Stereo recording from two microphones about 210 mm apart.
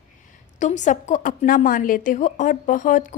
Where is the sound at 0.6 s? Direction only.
35° left (ahead or behind).